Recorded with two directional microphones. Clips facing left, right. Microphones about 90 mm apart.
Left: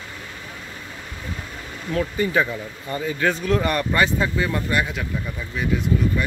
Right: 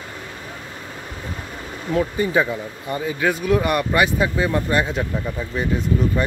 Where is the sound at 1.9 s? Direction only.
20° right (ahead or behind).